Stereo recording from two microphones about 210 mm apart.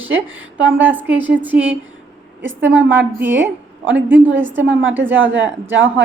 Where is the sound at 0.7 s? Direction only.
10° right (ahead or behind).